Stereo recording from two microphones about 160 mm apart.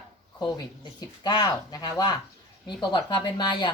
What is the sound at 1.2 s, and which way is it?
Speech, 25° left (ahead or behind).